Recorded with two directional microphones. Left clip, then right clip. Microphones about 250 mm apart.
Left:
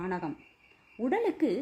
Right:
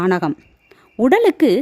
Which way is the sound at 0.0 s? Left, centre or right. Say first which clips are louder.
Right 17 dB; right.